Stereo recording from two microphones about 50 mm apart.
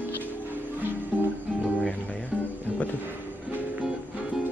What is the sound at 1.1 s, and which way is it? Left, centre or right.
Music, right.